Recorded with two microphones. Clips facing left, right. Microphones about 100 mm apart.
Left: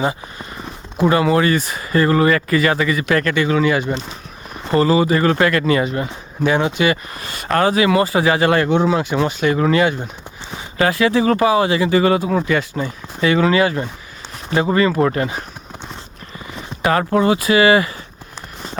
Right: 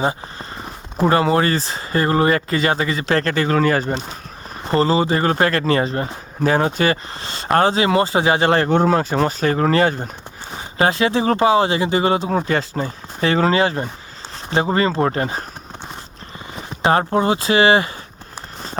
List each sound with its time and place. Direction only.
0.0 s speech: 30° right (ahead or behind)
4.7 s speech: 30° right (ahead or behind)
10.8 s speech: 30° right (ahead or behind)
16.6 s speech: 30° right (ahead or behind)